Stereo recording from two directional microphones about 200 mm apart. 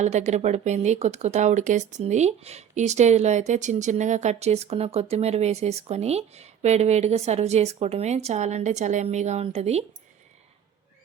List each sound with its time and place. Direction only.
0.0 s speech: 35° right (ahead or behind)